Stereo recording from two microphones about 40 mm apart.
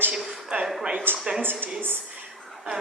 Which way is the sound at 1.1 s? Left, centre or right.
Right.